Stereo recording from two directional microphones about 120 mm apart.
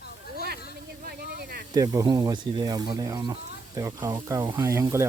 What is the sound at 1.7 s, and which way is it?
Speech, 30° right (ahead or behind).